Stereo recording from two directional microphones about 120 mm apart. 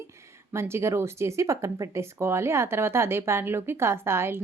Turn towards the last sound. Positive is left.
turn(degrees=-20)  # may be behind; listen again after turning